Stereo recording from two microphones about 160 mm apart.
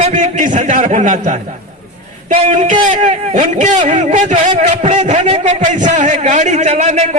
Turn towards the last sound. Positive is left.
turn(degrees=-45)  # may be behind; listen again after turning